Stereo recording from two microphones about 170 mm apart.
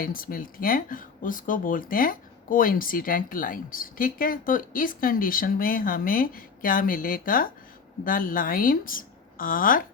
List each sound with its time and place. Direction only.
0.0 s speech: 55° left (ahead or behind)